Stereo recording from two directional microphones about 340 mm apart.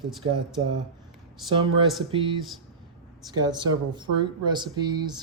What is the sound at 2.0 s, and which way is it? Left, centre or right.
Speech, centre.